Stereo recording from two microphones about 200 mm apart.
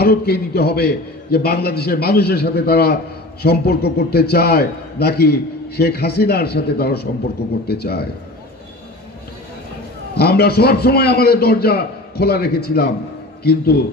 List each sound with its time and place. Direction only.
0.0 s a man's voice: 50° left (ahead or behind)
10.1 s a man's voice: 50° left (ahead or behind)